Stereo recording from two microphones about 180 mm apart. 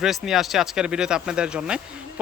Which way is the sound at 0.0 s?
Centre (ahead or behind).